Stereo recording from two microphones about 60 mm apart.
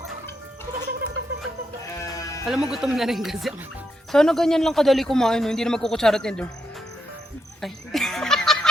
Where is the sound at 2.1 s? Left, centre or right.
Left.